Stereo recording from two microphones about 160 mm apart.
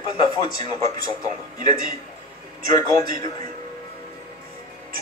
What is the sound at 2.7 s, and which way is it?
Speech, 20° left (ahead or behind).